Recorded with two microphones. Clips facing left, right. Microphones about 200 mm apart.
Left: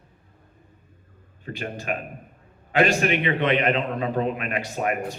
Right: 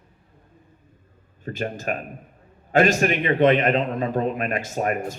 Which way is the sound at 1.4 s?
45° right (ahead or behind).